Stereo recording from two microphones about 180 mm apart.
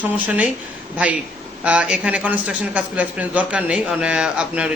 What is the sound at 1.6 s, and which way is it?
A man's voice, 5° right (ahead or behind).